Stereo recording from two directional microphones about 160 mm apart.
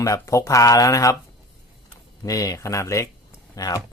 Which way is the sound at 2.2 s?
20° left (ahead or behind).